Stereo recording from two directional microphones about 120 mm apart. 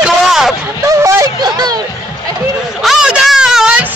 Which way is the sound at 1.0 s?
25° right (ahead or behind).